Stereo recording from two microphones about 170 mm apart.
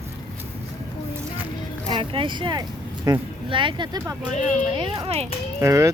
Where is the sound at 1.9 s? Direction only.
30° right (ahead or behind).